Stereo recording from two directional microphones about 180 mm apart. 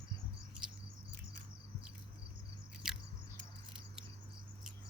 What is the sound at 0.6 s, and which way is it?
Patter, 5° right (ahead or behind).